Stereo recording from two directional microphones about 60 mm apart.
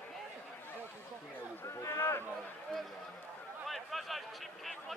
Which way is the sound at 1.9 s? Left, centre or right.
Left.